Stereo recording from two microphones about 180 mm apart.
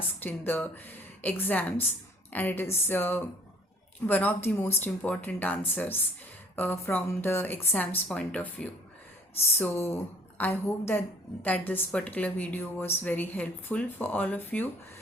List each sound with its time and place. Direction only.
0.2 s a woman's voice: 10° left (ahead or behind)